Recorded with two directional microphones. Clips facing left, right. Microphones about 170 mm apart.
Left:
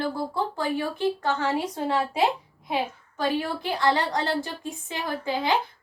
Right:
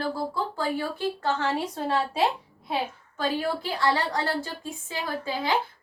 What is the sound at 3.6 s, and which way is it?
A woman's voice, 20° left (ahead or behind).